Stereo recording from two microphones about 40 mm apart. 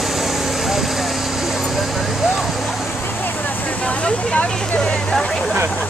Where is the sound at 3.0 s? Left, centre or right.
Left.